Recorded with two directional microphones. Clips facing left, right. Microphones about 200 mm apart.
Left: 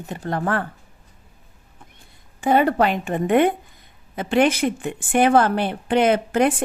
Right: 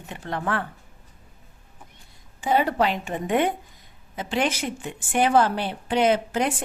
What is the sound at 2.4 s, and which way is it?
A woman's voice, 55° left (ahead or behind).